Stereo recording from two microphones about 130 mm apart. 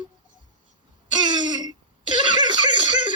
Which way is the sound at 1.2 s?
35° right (ahead or behind).